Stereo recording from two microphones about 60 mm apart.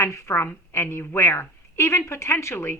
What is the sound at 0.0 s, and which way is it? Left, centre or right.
A woman's voice, left.